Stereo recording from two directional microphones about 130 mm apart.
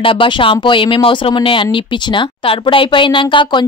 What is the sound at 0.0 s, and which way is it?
Speech, 40° left (ahead or behind).